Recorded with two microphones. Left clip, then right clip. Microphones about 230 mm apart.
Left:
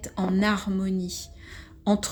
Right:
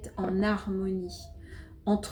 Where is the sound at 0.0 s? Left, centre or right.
Left.